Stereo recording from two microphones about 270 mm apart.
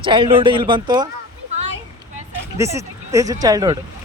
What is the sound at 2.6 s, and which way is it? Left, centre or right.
Speech, centre.